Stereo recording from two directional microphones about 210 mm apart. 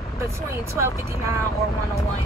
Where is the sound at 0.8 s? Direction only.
10° right (ahead or behind).